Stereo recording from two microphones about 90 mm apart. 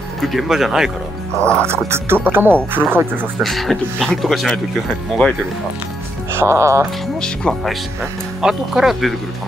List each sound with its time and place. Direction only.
0.2 s speech: centre (ahead or behind)
1.4 s speech: 10° left (ahead or behind)
1.7 s speech: 30° right (ahead or behind)
3.3 s speech: centre (ahead or behind)
6.3 s speech: 30° right (ahead or behind)
7.2 s speech: 5° left (ahead or behind)
8.4 s speech: 5° right (ahead or behind)